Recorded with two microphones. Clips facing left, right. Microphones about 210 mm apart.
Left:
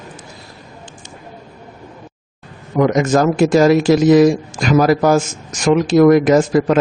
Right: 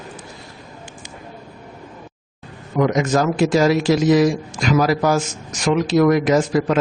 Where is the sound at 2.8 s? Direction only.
50° left (ahead or behind).